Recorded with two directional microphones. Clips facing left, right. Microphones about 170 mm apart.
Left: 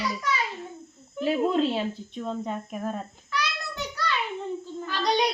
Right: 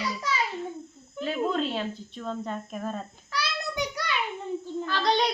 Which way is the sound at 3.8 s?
15° right (ahead or behind).